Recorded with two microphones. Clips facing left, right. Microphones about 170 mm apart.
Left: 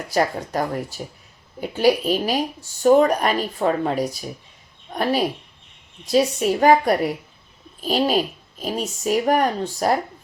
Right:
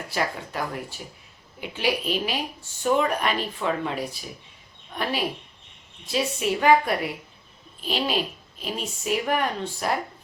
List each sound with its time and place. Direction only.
0.1 s speech: 40° left (ahead or behind)